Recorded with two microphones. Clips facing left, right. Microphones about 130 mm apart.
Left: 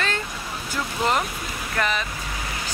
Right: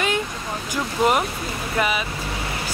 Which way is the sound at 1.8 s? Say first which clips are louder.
Right 2 dB; 10° right (ahead or behind).